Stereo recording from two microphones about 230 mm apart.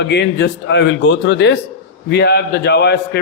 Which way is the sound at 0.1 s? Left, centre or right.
Left.